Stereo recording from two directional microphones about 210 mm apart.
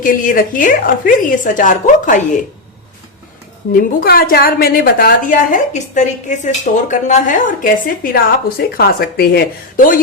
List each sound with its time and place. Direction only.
0.0 s a woman's voice: 40° left (ahead or behind)
3.7 s a woman's voice: 45° left (ahead or behind)